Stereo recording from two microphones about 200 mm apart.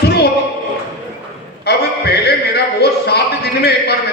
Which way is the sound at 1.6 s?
55° left (ahead or behind).